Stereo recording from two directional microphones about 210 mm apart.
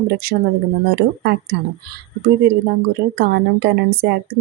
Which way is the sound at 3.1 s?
50° right (ahead or behind).